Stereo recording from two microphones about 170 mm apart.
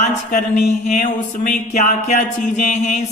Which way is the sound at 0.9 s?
45° left (ahead or behind).